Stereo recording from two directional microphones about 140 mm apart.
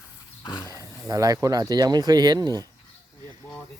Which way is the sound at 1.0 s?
25° right (ahead or behind).